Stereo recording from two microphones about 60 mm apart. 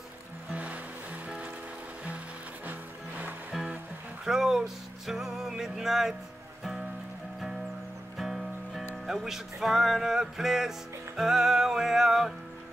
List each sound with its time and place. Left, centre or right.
0.5 s music: right
2.6 s music: right
4.2 s music: centre
8.2 s music: centre